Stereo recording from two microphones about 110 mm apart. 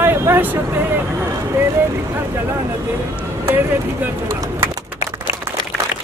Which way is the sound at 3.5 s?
20° right (ahead or behind).